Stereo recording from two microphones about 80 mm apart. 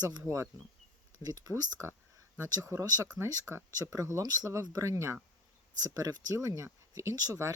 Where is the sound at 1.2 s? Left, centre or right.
Right.